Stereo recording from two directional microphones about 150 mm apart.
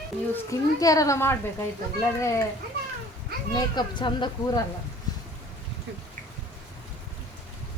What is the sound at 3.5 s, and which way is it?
Speech, 30° left (ahead or behind).